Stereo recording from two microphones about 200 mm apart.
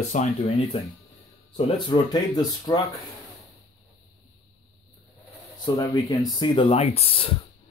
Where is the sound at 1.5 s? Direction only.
20° left (ahead or behind).